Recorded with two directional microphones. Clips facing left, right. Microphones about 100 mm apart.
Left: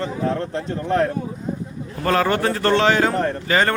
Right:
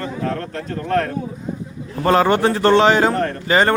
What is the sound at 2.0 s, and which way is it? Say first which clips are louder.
A man's voice: right 4 dB; 25° right (ahead or behind).